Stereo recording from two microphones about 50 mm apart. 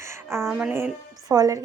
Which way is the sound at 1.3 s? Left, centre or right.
Right.